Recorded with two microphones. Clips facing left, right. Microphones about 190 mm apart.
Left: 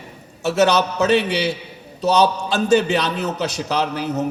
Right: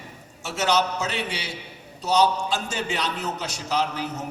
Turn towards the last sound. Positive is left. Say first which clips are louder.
# left 5 dB
turn(degrees=65)  # may be behind; listen again after turning